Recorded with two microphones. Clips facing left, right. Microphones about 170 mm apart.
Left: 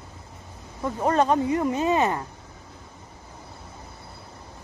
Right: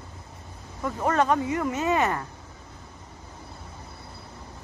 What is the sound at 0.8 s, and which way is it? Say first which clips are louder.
Speech: left 2 dB; 20° left (ahead or behind).